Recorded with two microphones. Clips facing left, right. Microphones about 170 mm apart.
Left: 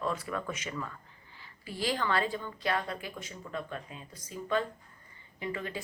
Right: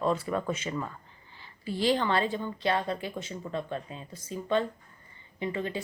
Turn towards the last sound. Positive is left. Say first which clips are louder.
# right 4 dB
turn(degrees=-25)  # may be behind; listen again after turning